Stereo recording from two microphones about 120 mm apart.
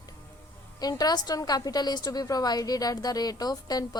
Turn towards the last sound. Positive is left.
turn(degrees=35)  # may be behind; listen again after turning